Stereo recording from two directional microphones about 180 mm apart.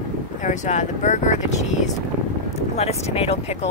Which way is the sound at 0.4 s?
45° left (ahead or behind).